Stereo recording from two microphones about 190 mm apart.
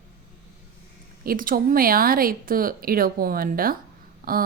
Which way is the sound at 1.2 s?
50° right (ahead or behind).